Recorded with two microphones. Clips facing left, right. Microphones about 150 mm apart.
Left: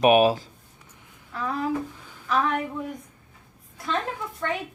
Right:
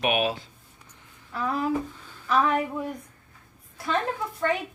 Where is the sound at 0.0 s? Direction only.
40° left (ahead or behind).